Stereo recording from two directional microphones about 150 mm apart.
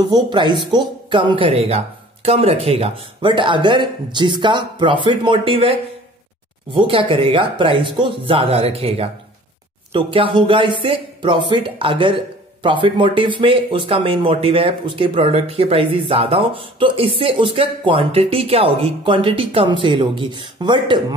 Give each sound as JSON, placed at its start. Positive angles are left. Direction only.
{"t": 0.3, "sound": "speech", "side_deg": -30}